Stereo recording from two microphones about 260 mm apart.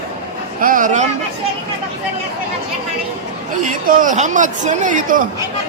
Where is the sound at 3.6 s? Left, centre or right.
Right.